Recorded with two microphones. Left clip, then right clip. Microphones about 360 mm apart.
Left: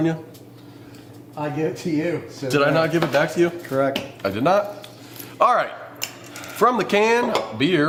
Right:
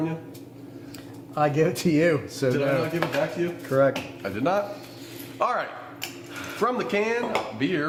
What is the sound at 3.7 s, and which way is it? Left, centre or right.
Speech, right.